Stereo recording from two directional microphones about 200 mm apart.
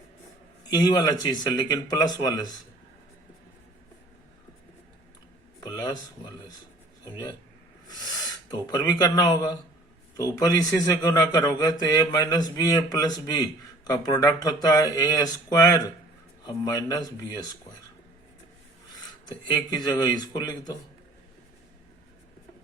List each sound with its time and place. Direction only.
0.7 s a man's voice: 20° left (ahead or behind)
5.5 s a sound: 20° left (ahead or behind)
7.9 s a man's voice: 20° left (ahead or behind)
19.3 s a man's voice: 20° left (ahead or behind)